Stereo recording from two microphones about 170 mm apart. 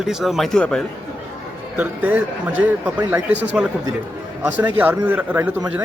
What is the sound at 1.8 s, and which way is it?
Speech, 10° right (ahead or behind).